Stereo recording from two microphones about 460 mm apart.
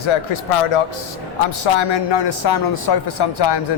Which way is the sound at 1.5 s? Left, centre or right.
Left.